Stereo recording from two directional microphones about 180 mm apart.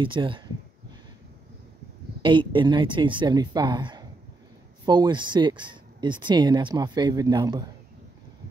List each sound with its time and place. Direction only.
0.0 s speech: 30° right (ahead or behind)
2.2 s speech: 25° right (ahead or behind)